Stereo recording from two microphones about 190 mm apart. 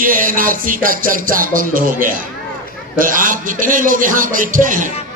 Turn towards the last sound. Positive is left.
turn(degrees=-45)  # may be behind; listen again after turning